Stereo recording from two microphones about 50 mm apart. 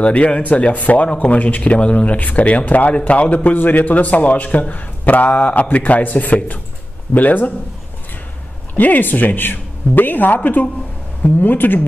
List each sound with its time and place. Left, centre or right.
0.0 s speech: left
8.7 s speech: left